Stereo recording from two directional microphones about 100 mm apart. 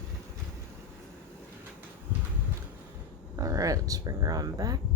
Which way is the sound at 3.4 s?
35° right (ahead or behind).